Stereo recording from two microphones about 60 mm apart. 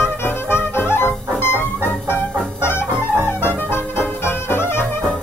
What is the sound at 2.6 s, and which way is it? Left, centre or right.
Music, left.